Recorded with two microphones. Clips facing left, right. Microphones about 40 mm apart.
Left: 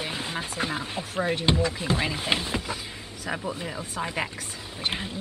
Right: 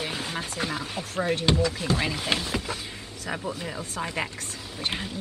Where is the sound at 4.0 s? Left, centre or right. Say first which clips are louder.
Left 1 dB; centre.